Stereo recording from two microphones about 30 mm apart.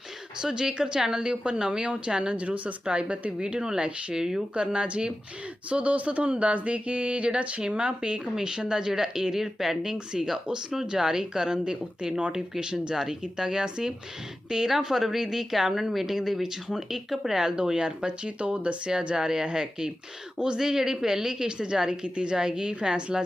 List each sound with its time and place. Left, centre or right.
0.4 s a woman's voice: centre; by 2.7 s right
2.8 s speech: right
3.3 s a woman's voice: right
4.1 s a woman's voice: right
4.5 s speech: right
5.6 s a sound: right
7.6 s a woman's voice: right; by 9.7 s centre
9.8 s a woman's voice: right
14.8 s a woman's voice: centre
17.6 s speech: right
19.1 s a woman's voice: centre
20.6 s a woman's voice: centre
22.0 s speech: right
22.3 s a woman's voice: right